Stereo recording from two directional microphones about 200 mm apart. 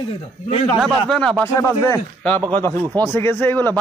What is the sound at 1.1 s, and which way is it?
A man's voice, 5° left (ahead or behind).